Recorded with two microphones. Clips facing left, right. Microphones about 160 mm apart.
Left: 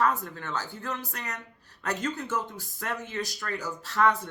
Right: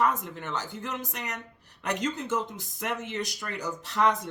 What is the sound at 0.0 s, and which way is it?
Speech, 20° right (ahead or behind).